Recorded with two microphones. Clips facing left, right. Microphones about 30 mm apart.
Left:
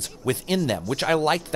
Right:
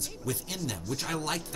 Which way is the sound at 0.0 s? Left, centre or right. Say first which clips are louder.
Left 8 dB; left.